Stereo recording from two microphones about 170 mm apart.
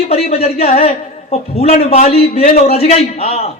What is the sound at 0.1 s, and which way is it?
A man's voice, 40° left (ahead or behind).